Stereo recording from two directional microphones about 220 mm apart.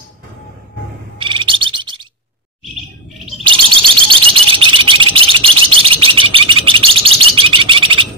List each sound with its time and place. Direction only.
1.2 s bird: 20° right (ahead or behind)
3.4 s bird: 20° right (ahead or behind)